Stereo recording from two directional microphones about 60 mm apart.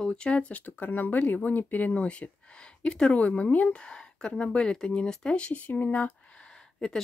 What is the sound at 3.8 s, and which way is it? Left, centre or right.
Speech, centre.